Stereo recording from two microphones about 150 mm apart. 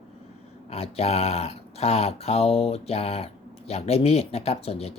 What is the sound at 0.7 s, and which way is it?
Speech, 45° left (ahead or behind).